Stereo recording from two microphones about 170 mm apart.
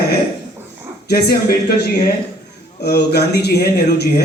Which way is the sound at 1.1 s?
70° left (ahead or behind).